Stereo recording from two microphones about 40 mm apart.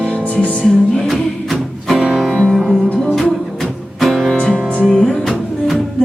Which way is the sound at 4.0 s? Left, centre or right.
Centre.